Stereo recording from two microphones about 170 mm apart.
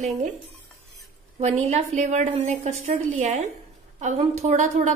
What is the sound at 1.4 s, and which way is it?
A woman's voice, 40° right (ahead or behind).